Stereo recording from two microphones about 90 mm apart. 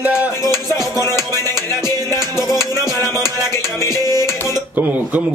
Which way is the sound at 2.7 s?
45° right (ahead or behind).